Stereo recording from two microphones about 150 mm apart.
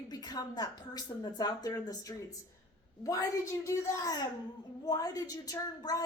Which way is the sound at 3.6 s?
20° left (ahead or behind).